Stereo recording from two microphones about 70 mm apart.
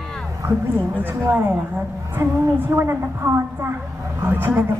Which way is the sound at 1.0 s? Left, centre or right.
Right.